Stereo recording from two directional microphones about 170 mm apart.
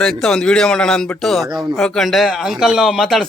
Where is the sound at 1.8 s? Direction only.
Centre (ahead or behind).